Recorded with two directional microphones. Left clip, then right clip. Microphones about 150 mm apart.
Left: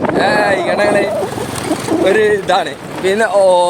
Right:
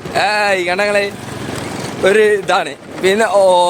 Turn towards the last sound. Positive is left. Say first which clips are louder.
# even
turn(degrees=-25)  # may be behind; listen again after turning